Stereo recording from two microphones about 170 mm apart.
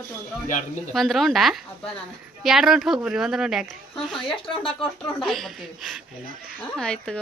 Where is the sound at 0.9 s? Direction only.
Centre (ahead or behind).